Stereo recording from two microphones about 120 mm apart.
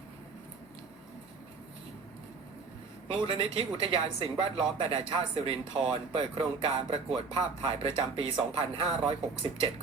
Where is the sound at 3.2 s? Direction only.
50° right (ahead or behind).